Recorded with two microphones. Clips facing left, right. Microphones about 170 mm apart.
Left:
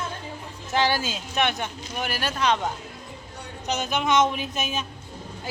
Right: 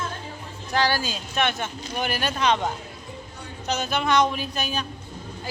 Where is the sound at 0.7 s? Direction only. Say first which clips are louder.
Even; 20° left (ahead or behind).